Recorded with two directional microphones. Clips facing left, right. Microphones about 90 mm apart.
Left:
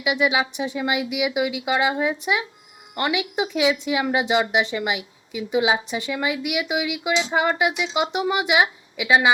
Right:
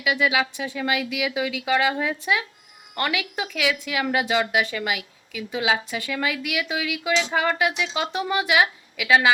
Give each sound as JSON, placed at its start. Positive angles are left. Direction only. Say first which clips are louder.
{"t": 0.0, "sound": "speech", "louder": "left 1 dB", "side_deg": 20}